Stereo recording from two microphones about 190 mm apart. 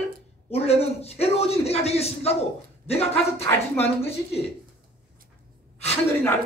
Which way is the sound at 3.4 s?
10° left (ahead or behind).